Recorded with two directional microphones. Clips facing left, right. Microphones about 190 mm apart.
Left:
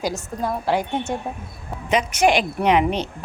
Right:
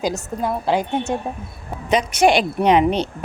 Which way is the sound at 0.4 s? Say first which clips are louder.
Right 2 dB; 20° right (ahead or behind).